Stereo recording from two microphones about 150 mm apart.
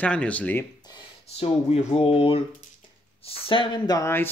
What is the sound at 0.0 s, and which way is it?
Speech, 10° left (ahead or behind).